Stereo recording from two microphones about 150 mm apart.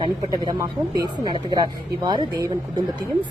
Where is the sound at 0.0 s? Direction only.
25° right (ahead or behind).